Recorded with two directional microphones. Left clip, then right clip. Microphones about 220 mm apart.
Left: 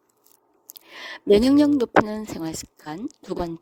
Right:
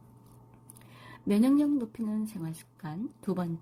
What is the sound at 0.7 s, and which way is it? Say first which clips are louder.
Speech: left 15 dB; 50° left (ahead or behind).